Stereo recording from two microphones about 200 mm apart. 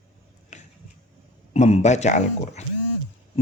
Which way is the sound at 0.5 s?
35° left (ahead or behind).